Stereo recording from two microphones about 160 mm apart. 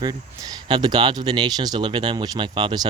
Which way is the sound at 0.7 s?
25° right (ahead or behind).